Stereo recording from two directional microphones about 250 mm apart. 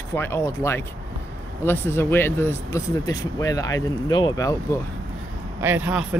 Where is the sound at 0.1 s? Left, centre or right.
Centre.